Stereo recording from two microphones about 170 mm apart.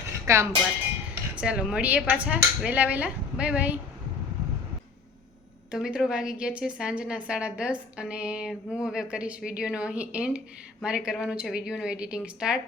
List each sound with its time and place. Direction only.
0.3 s speech: 15° right (ahead or behind)
1.1 s speech: 5° right (ahead or behind)
5.7 s a woman's voice: 5° right (ahead or behind)